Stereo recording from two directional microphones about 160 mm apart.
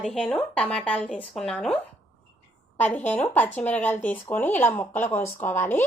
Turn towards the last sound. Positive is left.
turn(degrees=15)  # may be behind; listen again after turning